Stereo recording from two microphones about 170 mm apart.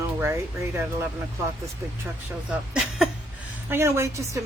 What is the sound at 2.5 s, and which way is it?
Speech, 5° right (ahead or behind).